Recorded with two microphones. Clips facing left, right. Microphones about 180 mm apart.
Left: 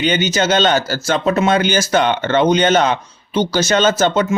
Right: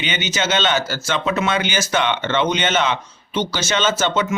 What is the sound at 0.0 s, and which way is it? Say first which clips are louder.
Speech: left 7 dB; 40° left (ahead or behind).